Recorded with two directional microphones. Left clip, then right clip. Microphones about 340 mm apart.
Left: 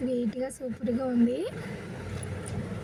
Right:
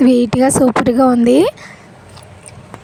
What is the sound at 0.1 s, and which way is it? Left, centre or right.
Speech, right.